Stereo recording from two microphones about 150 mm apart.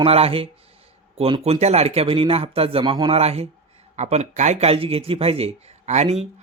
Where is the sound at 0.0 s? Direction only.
40° right (ahead or behind).